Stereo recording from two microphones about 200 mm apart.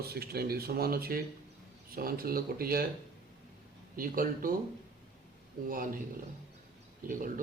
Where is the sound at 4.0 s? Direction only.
45° right (ahead or behind).